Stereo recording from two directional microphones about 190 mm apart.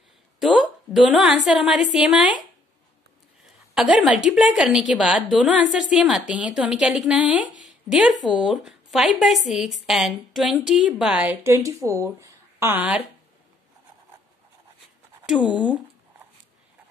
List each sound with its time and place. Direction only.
0.4 s a woman's voice: 5° right (ahead or behind)
3.7 s a woman's voice: centre (ahead or behind)